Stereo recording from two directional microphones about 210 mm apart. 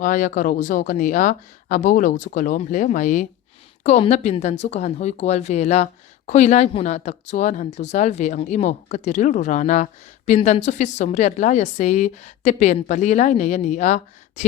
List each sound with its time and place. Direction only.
0.0 s speech: 40° left (ahead or behind)